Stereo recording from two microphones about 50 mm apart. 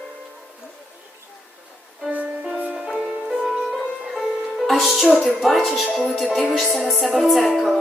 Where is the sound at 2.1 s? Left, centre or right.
Right.